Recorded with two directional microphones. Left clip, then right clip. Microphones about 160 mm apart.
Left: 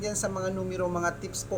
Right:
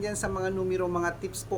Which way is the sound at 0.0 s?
5° right (ahead or behind).